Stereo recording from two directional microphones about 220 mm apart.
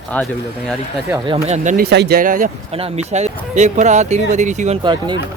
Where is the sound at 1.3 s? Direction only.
30° right (ahead or behind).